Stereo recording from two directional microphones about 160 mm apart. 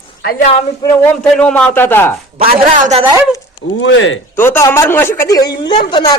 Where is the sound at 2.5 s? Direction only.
55° right (ahead or behind).